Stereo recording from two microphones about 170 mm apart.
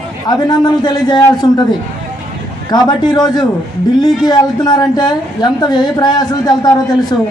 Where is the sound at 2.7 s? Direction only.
25° left (ahead or behind).